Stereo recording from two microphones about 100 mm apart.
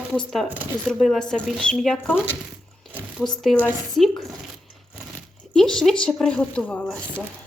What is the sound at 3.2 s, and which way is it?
Speech, centre (ahead or behind).